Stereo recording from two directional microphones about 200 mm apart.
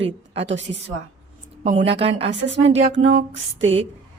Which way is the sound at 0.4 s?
65° right (ahead or behind).